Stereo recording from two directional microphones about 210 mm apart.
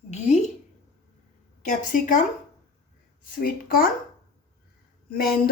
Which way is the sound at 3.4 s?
45° left (ahead or behind).